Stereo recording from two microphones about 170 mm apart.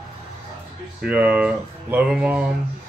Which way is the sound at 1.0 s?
10° right (ahead or behind).